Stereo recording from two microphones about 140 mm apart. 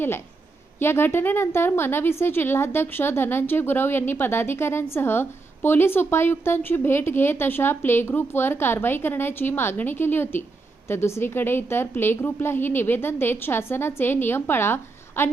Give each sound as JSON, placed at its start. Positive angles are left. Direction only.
{"t": 0.8, "sound": "a woman's voice", "side_deg": 15}